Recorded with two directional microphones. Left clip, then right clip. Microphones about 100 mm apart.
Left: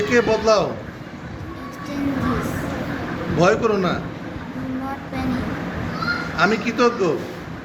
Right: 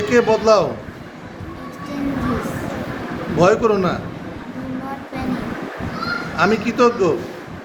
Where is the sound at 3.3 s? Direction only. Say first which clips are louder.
Right 3 dB; 35° right (ahead or behind).